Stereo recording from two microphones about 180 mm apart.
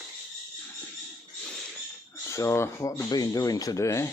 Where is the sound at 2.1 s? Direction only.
15° left (ahead or behind).